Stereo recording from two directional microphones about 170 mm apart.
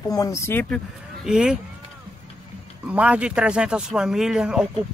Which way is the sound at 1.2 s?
5° right (ahead or behind).